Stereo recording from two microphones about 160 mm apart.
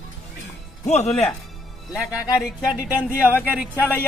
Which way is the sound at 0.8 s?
45° left (ahead or behind).